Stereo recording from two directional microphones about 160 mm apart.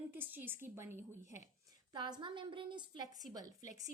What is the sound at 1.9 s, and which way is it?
A woman's voice, 25° right (ahead or behind).